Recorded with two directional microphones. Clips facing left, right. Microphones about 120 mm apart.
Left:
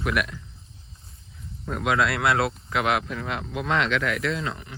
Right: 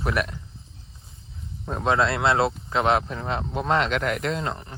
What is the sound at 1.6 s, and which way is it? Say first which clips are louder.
Speech: right 1 dB; 30° right (ahead or behind).